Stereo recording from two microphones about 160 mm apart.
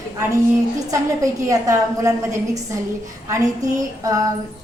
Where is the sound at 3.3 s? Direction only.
20° right (ahead or behind).